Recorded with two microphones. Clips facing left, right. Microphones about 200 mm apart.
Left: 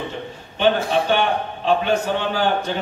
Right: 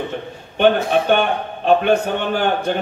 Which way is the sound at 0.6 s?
55° right (ahead or behind).